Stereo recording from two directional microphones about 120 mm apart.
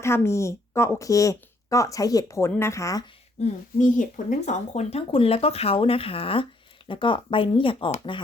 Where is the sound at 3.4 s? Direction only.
85° left.